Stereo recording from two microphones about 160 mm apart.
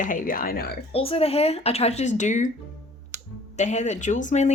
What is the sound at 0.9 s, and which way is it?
Speech, 35° left (ahead or behind).